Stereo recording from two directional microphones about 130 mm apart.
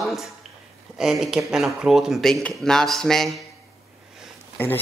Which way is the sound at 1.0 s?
5° right (ahead or behind).